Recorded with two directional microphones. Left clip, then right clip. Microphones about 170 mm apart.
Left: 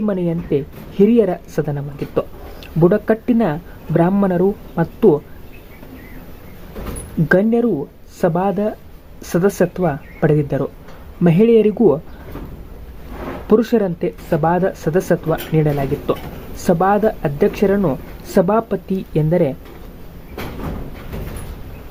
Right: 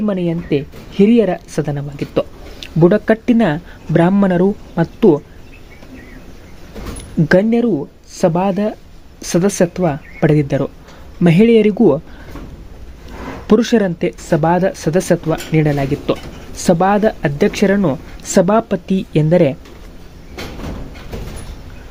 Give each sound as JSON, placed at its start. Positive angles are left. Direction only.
{"t": 0.0, "sound": "speech", "side_deg": -20}
{"t": 7.3, "sound": "speech", "side_deg": -20}
{"t": 13.5, "sound": "speech", "side_deg": -20}